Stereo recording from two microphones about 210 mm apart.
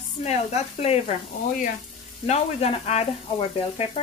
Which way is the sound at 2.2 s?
30° left (ahead or behind).